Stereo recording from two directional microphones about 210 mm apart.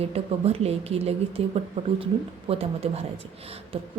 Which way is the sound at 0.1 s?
30° right (ahead or behind).